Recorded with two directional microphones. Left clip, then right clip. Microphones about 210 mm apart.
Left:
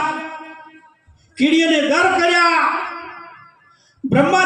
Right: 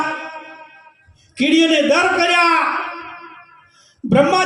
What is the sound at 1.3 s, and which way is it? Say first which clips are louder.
A man's voice: right 1 dB; 60° right (ahead or behind).